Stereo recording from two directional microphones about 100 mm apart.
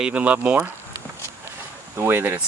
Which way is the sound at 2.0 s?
20° right (ahead or behind).